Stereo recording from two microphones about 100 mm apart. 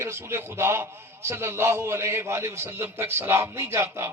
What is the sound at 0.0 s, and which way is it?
A man's voice, 25° right (ahead or behind).